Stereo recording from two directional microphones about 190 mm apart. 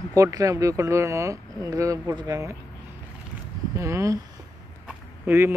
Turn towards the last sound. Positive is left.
turn(degrees=-10)  # may be behind; listen again after turning